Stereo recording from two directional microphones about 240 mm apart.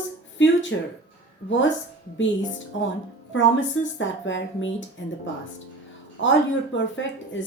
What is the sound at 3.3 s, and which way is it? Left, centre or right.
A woman's voice, left.